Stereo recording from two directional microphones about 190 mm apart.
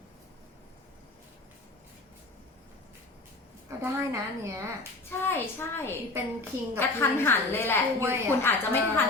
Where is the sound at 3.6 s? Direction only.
15° right (ahead or behind).